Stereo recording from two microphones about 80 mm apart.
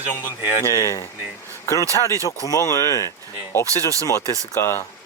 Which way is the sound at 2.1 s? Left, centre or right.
Right.